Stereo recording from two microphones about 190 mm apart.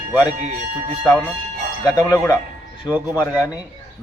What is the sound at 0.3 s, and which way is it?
Speech, 35° right (ahead or behind).